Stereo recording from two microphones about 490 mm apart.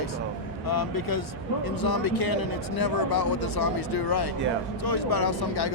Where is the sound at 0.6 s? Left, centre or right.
Left.